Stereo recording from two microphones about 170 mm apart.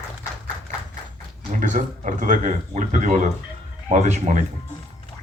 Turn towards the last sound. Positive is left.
turn(degrees=-40)  # may be behind; listen again after turning